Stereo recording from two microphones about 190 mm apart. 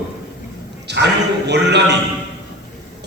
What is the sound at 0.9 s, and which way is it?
Speech, 65° right (ahead or behind).